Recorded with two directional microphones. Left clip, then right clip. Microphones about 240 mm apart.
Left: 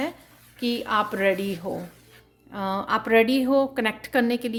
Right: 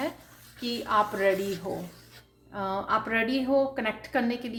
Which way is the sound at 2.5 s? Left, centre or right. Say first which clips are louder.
Left 2 dB; left.